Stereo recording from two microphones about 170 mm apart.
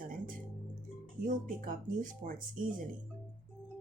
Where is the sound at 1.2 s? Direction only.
50° right (ahead or behind).